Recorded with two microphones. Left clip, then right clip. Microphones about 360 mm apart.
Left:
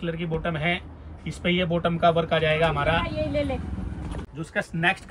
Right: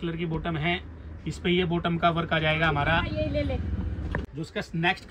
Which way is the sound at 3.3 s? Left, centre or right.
Left.